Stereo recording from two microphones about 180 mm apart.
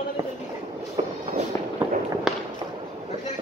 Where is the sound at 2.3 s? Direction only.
Centre (ahead or behind).